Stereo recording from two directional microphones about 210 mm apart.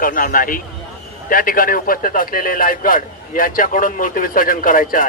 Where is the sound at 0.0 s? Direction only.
40° left (ahead or behind).